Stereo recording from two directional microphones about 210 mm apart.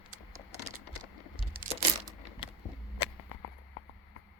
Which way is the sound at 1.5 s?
45° right (ahead or behind).